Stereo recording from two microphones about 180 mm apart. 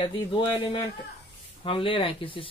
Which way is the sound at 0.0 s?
25° left (ahead or behind).